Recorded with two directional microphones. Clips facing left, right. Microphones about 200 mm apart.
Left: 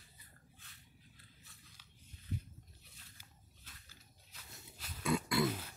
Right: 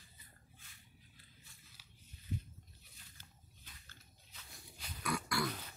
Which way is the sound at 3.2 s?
5° left (ahead or behind).